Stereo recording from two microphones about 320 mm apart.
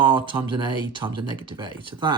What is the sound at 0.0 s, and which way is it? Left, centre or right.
Speech, centre.